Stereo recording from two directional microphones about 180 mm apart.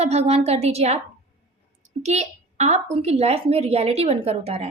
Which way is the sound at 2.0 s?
40° right (ahead or behind).